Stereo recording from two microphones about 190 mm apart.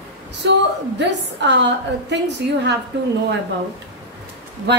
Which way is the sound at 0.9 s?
65° right (ahead or behind).